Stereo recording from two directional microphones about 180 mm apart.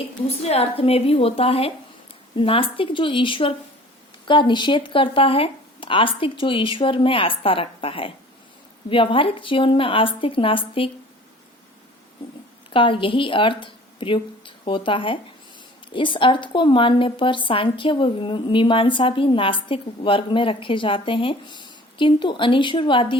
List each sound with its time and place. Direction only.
0.4 s a woman's voice: 35° left (ahead or behind)
12.7 s a woman's voice: 30° left (ahead or behind)